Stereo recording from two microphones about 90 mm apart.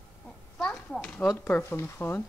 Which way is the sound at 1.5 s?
25° left (ahead or behind).